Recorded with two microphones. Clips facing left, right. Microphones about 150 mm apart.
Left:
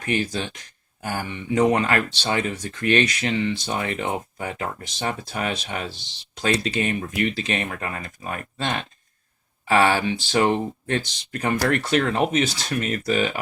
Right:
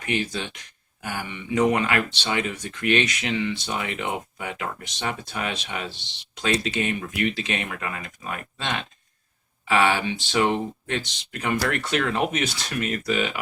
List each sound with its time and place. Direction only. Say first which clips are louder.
0.0 s speech: left 2 dB; 35° left (ahead or behind)